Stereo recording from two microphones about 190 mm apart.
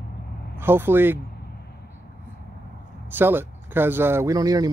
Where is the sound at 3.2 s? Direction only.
10° right (ahead or behind).